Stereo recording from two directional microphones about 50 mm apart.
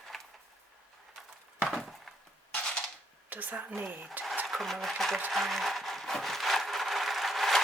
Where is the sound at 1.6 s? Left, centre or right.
Centre.